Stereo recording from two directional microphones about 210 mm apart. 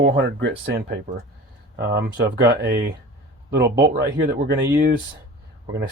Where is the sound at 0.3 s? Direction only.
65° right (ahead or behind).